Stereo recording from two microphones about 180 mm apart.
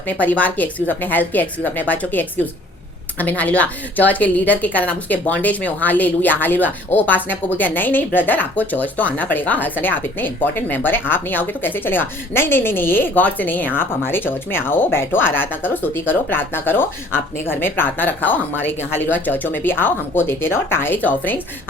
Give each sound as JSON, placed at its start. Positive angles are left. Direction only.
{"t": 0.2, "sound": "a woman's voice", "side_deg": 10}